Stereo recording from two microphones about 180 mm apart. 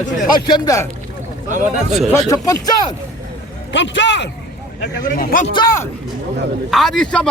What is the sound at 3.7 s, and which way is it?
Speech, 85° left.